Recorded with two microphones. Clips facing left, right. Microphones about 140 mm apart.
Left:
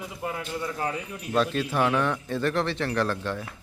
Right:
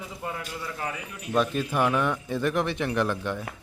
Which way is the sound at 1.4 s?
10° right (ahead or behind).